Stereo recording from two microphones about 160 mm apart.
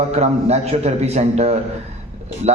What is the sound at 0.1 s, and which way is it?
A man's voice, 40° right (ahead or behind).